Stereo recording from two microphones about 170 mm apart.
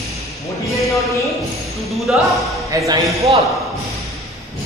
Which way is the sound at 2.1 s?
5° right (ahead or behind).